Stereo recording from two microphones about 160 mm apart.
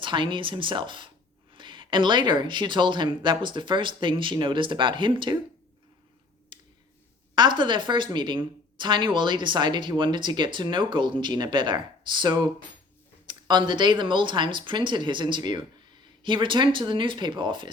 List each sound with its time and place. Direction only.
0.0 s speech: 30° right (ahead or behind)
6.5 s a sound: 30° right (ahead or behind)
7.3 s speech: 30° right (ahead or behind)